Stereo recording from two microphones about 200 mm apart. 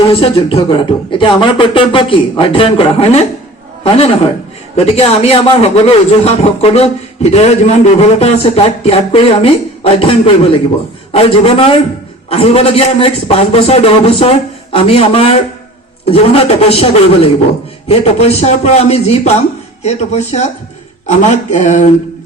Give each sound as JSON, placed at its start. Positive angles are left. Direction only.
{"t": 0.0, "sound": "a man's voice", "side_deg": 25}